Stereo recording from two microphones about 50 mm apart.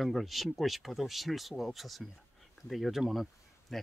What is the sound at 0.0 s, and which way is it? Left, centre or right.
Speech, centre.